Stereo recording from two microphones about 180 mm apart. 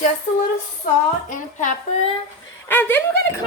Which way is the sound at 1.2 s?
45° left (ahead or behind).